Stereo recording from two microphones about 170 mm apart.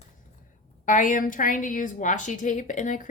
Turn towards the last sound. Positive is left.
turn(degrees=45)  # may be behind; listen again after turning